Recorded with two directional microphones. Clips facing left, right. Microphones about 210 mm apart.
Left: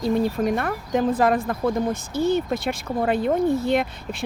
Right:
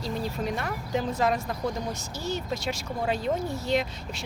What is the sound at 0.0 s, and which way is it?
Speech, 55° left (ahead or behind).